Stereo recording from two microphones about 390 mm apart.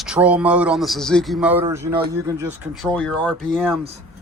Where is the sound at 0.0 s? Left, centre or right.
Centre.